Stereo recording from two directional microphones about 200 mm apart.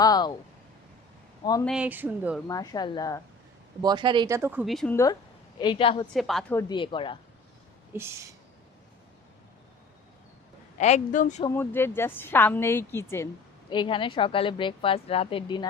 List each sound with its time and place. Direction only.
0.0 s a woman's voice: 20° left (ahead or behind)
1.6 s speech: 5° right (ahead or behind)
2.5 s a woman's voice: 20° left (ahead or behind)
3.8 s speech: 20° right (ahead or behind)
4.4 s speech: 10° right (ahead or behind)
4.6 s a woman's voice: centre (ahead or behind)
5.5 s a woman's voice: 25° left (ahead or behind)
6.1 s a woman's voice: centre (ahead or behind)
6.5 s a woman's voice: 20° left (ahead or behind)
7.9 s speech: 15° right (ahead or behind)
10.8 s speech: 35° left (ahead or behind)
11.4 s a woman's voice: 10° left (ahead or behind)
13.7 s a woman's voice: 25° left (ahead or behind)